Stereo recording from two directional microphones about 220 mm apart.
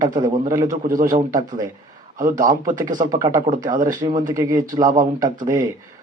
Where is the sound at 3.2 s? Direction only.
15° right (ahead or behind).